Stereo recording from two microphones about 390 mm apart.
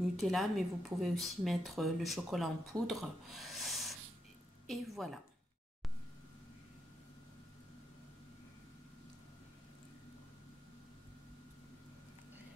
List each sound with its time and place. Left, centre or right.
0.2 s speech: centre